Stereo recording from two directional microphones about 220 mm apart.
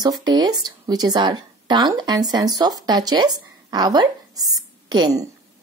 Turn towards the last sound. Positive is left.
turn(degrees=-15)  # may be behind; listen again after turning